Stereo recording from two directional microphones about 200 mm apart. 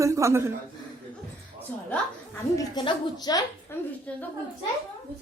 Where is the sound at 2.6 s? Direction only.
20° left (ahead or behind).